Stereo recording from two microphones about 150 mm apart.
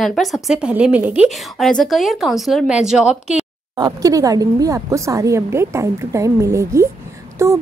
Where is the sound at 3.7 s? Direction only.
25° right (ahead or behind).